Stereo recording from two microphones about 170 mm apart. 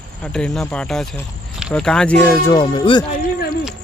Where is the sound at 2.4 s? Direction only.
25° left (ahead or behind).